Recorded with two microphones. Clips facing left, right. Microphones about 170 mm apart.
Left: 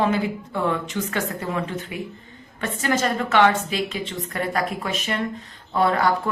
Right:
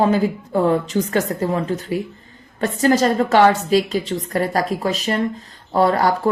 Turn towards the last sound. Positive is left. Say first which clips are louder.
# right 4 dB
turn(degrees=-35)  # may be behind; listen again after turning